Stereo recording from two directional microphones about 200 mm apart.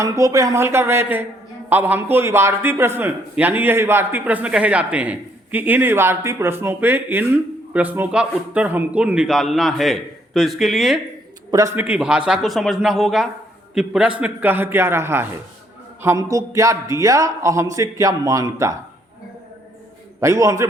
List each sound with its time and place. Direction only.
0.0 s a man's voice: 15° right (ahead or behind); by 11.0 s centre (ahead or behind)
11.5 s a man's voice: 15° right (ahead or behind)
20.1 s a man's voice: 15° right (ahead or behind)